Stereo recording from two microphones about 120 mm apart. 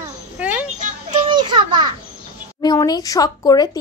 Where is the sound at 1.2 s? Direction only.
40° right (ahead or behind).